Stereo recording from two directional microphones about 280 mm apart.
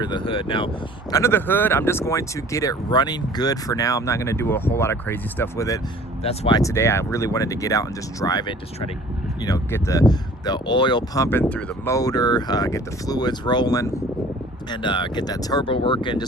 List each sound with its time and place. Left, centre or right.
0.0 s speech: centre